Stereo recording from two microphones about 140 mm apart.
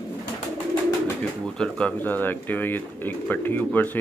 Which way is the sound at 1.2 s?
5° left (ahead or behind).